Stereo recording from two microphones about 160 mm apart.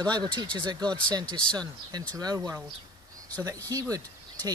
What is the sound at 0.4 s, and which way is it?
Speech, 30° right (ahead or behind).